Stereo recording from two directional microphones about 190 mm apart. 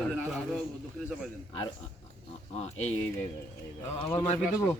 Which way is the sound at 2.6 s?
35° left (ahead or behind).